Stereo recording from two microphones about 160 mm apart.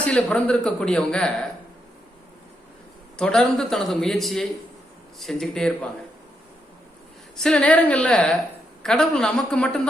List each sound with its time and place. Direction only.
0.0 s speech: 5° left (ahead or behind)
3.2 s speech: 5° left (ahead or behind)
7.3 s a woman's voice: 5° left (ahead or behind)